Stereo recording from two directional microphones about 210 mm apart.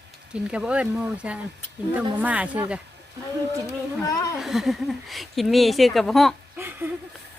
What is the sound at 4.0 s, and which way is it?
Speech, 15° left (ahead or behind).